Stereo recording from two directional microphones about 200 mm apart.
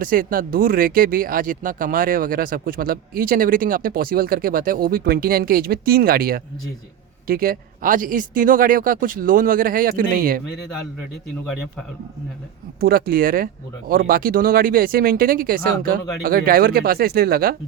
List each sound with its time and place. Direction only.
0.0 s speech: 45° right (ahead or behind)
12.8 s speech: 45° right (ahead or behind)